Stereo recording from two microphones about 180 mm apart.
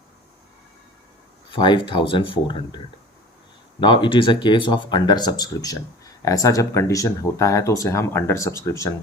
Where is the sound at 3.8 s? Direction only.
25° left (ahead or behind).